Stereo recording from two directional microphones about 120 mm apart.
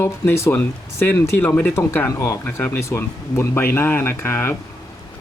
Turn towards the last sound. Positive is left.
turn(degrees=20)  # may be behind; listen again after turning